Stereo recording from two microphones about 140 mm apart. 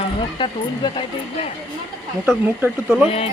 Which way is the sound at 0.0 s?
40° left (ahead or behind).